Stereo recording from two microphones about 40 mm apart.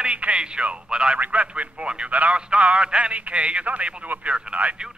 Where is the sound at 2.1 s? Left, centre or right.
Right.